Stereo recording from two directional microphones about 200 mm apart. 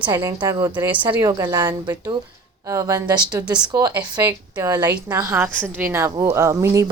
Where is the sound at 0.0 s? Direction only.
20° right (ahead or behind).